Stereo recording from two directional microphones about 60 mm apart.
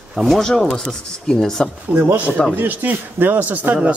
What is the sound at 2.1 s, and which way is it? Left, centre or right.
Speech, right.